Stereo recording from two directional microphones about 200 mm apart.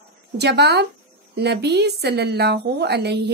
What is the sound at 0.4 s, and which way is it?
A woman's voice, 55° right (ahead or behind).